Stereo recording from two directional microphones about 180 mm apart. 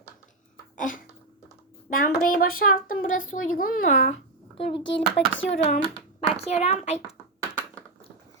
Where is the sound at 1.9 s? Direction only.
50° left (ahead or behind).